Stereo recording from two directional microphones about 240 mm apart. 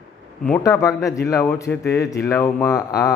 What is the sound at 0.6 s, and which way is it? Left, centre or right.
A man's voice, centre.